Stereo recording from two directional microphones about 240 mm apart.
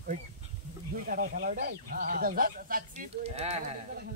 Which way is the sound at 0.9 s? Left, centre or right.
Right.